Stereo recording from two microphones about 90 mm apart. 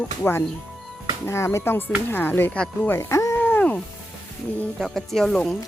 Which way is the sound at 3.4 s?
20° left (ahead or behind).